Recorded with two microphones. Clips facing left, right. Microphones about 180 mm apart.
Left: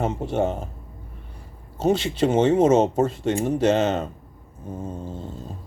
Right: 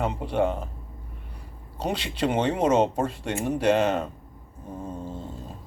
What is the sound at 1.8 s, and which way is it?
Speech, 25° left (ahead or behind).